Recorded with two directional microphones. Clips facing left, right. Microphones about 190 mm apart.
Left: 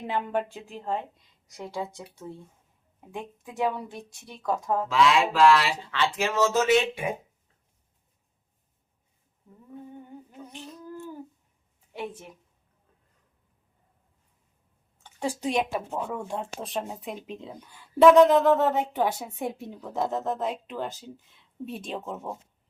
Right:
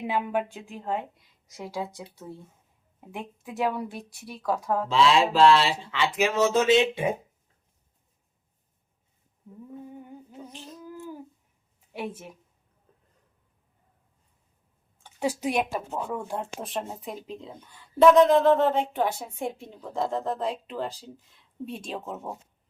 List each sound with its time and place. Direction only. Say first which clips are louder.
0.0 s speech: right 1 dB; 5° right (ahead or behind)
3.7 s speech: right 1 dB; 10° right (ahead or behind)
4.9 s speech: right 1 dB; 30° right (ahead or behind)
5.9 s speech: right 1 dB; 10° right (ahead or behind)
10.5 s a sound: left 4 dB; centre (ahead or behind)
11.9 s speech: right 1 dB; 10° right (ahead or behind)
15.0 s speech: right 2 dB; 10° right (ahead or behind)